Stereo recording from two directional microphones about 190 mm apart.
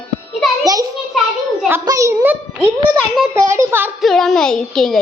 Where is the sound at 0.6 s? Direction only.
20° right (ahead or behind).